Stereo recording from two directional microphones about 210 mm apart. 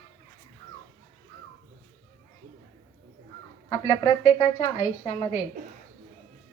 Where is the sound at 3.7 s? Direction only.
15° left (ahead or behind).